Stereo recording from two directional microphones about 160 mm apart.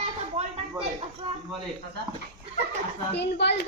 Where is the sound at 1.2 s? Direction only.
35° right (ahead or behind).